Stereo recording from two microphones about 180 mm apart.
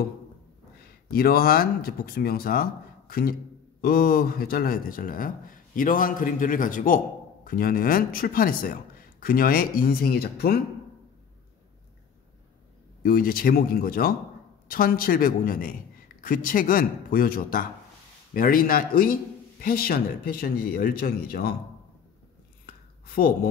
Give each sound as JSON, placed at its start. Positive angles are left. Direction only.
{"t": 1.1, "sound": "speech", "side_deg": 55}
{"t": 13.0, "sound": "speech", "side_deg": 55}
{"t": 23.0, "sound": "speech", "side_deg": 55}